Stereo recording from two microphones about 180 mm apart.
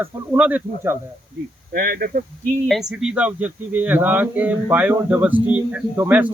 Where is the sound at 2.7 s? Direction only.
Centre (ahead or behind).